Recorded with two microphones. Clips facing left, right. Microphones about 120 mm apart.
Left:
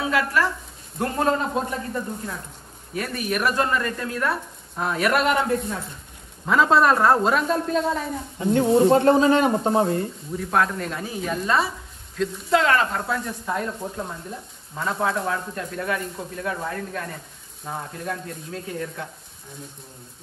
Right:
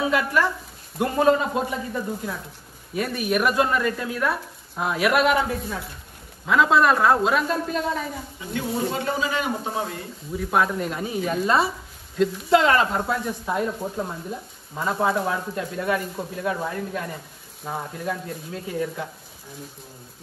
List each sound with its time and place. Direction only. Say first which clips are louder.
0.2 s speech: even; centre (ahead or behind)
8.5 s speech: left 9 dB; 30° left (ahead or behind)
8.9 s speech: left 9 dB; 45° left (ahead or behind)
10.3 s speech: right 1 dB; 5° right (ahead or behind)